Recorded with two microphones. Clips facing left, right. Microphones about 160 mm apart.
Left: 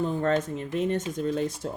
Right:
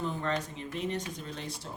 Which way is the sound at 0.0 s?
45° left (ahead or behind).